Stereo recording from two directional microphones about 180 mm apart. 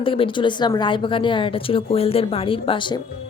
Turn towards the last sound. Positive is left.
turn(degrees=25)  # may be behind; listen again after turning